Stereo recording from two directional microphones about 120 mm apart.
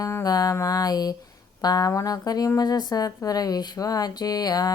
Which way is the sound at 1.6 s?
30° left (ahead or behind).